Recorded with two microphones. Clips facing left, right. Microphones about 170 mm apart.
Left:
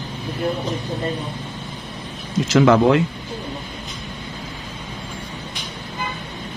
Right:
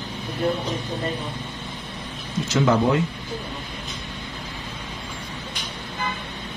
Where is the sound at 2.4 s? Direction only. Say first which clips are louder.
Left 6 dB; 90° left.